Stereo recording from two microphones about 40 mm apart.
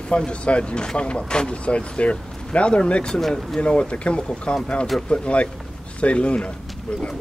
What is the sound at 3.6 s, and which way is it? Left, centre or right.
Speech, left.